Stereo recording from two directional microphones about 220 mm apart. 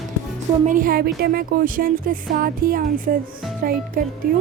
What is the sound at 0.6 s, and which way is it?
Speech, 35° right (ahead or behind).